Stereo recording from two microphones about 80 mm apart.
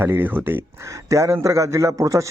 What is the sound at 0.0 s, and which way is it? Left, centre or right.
Speech, right.